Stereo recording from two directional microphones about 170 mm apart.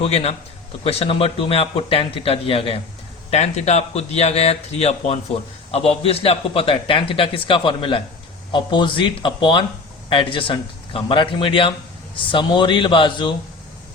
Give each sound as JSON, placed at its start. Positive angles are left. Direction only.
{"t": 0.0, "sound": "a man's voice", "side_deg": 35}